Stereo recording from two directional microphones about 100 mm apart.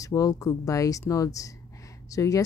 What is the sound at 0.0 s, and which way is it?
Speech, 35° left (ahead or behind).